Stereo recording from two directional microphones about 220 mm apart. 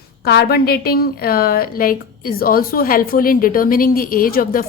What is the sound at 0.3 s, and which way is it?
A woman's voice, 45° left (ahead or behind).